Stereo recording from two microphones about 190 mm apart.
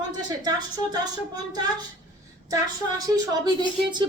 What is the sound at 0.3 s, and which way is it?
A woman's voice, 20° right (ahead or behind).